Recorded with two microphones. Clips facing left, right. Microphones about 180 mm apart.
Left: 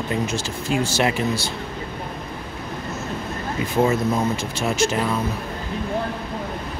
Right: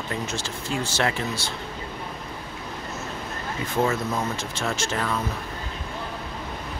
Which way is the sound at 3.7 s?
10° left (ahead or behind).